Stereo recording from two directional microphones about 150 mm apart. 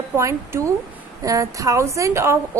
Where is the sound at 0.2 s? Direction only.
20° right (ahead or behind).